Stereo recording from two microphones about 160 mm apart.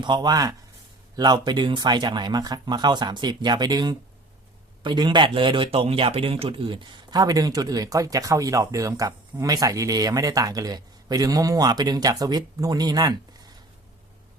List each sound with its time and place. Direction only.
0.0 s a man's voice: 25° right (ahead or behind)